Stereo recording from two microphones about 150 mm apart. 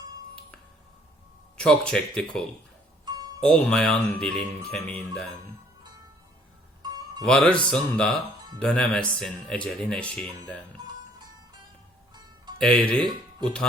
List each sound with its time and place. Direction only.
1.5 s speech: 5° left (ahead or behind)
7.3 s speech: 5° left (ahead or behind)
12.5 s speech: 5° left (ahead or behind)